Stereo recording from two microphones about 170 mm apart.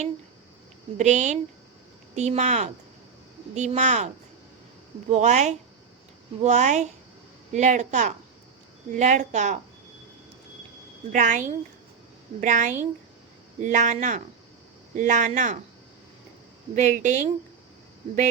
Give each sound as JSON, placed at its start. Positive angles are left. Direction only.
{"t": 0.9, "sound": "a woman's voice", "side_deg": -45}
{"t": 5.1, "sound": "a woman's voice", "side_deg": -40}
{"t": 11.1, "sound": "a woman's voice", "side_deg": -45}
{"t": 16.7, "sound": "a woman's voice", "side_deg": -45}